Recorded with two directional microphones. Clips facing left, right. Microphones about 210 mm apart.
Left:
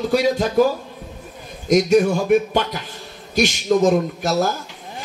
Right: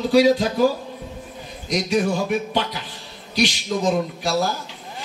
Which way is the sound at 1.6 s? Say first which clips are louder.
Left 6 dB; 45° left (ahead or behind).